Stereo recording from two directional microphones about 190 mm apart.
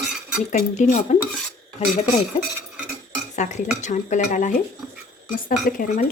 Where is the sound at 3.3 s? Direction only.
40° left (ahead or behind).